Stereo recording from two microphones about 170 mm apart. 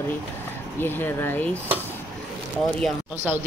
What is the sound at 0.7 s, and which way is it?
Speech, 10° left (ahead or behind).